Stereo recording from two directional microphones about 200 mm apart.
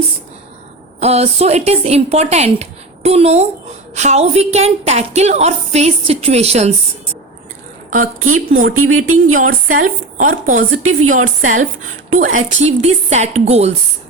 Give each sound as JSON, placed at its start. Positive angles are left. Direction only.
{"t": 0.9, "sound": "a woman's voice", "side_deg": -30}
{"t": 7.9, "sound": "a woman's voice", "side_deg": -40}
{"t": 8.8, "sound": "a woman's voice", "side_deg": -90}
{"t": 9.4, "sound": "a woman's voice", "side_deg": -45}
{"t": 10.5, "sound": "a woman's voice", "side_deg": -90}
{"t": 11.4, "sound": "a woman's voice", "side_deg": -40}